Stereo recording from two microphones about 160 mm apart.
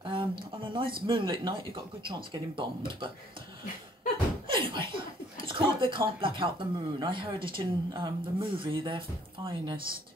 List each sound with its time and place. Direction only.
0.0 s a sound: 30° right (ahead or behind)
1.0 s speech: 30° right (ahead or behind)
4.5 s speech: 30° right (ahead or behind)